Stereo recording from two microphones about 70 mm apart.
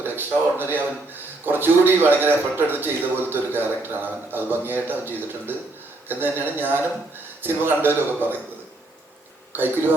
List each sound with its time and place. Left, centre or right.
0.0 s a man's voice: right
9.5 s a man's voice: right